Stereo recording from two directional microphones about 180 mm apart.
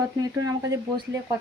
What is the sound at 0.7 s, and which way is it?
Speech, 20° right (ahead or behind).